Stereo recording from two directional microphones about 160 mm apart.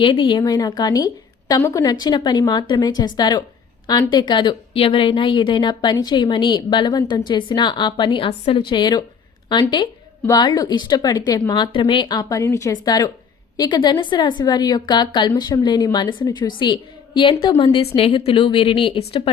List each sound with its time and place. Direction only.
0.0 s a woman's voice: 30° left (ahead or behind)